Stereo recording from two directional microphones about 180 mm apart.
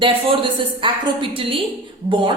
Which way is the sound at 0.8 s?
30° right (ahead or behind).